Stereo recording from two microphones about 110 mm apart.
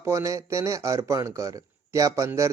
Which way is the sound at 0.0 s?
25° right (ahead or behind).